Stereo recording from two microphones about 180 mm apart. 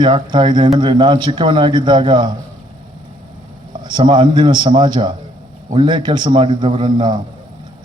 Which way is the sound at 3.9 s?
25° right (ahead or behind).